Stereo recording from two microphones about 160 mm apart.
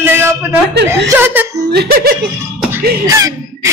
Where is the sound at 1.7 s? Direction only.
80° right.